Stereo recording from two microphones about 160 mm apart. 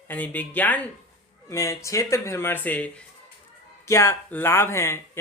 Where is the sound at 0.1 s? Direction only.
10° left (ahead or behind).